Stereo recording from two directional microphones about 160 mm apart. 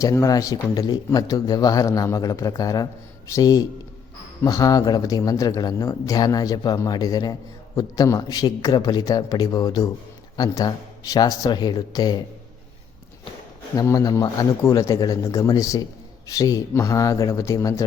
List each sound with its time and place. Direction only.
0.0 s speech: 20° left (ahead or behind)
13.7 s speech: 20° left (ahead or behind)